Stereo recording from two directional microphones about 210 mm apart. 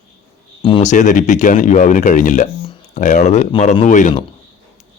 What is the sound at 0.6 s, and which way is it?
Speech, 20° left (ahead or behind).